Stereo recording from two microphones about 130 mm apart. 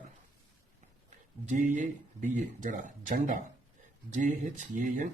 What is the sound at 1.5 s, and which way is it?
Speech, 70° right (ahead or behind).